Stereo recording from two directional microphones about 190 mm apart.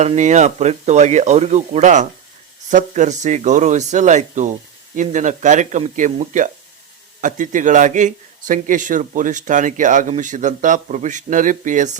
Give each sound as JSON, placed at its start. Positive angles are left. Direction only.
{"t": 0.0, "sound": "a man's voice", "side_deg": -40}